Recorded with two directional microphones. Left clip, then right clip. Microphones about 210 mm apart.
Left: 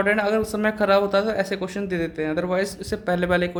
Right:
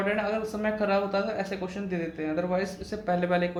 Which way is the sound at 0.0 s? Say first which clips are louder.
Left 7 dB; 55° left (ahead or behind).